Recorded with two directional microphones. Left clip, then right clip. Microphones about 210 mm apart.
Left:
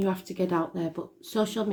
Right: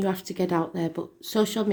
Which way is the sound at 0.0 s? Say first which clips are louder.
Right 1 dB; 35° right (ahead or behind).